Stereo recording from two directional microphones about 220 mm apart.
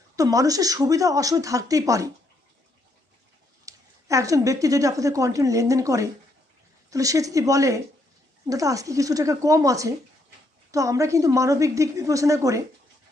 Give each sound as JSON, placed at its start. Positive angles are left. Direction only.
{"t": 0.2, "sound": "a woman's voice", "side_deg": -15}
{"t": 3.7, "sound": "a woman's voice", "side_deg": -15}